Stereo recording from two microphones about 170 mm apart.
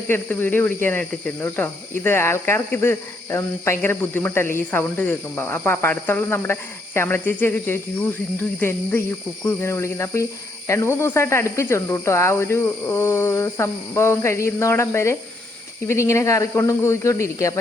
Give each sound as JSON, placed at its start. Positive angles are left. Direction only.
{"t": 0.1, "sound": "speech", "side_deg": 10}